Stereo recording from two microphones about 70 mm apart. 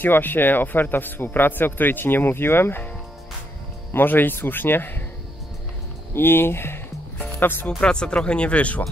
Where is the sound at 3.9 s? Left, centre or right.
Left.